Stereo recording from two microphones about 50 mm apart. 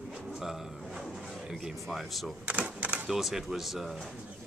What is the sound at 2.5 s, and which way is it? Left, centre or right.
Speech, right.